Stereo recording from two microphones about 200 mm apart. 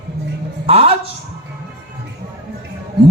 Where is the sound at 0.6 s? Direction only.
30° right (ahead or behind).